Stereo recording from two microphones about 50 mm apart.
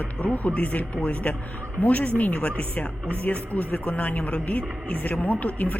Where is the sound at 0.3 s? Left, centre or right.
Left.